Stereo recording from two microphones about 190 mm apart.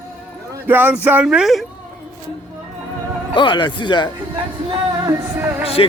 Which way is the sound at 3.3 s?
25° left (ahead or behind).